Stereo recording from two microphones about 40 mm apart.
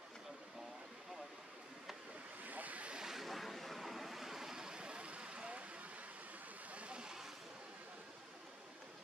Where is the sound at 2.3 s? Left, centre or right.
Right.